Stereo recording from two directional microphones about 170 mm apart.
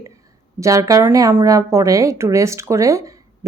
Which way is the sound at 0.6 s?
20° right (ahead or behind).